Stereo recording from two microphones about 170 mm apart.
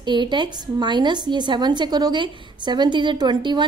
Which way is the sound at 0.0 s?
25° right (ahead or behind).